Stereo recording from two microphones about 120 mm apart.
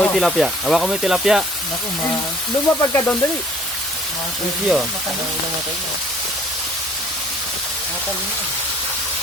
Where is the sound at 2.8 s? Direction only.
25° left (ahead or behind).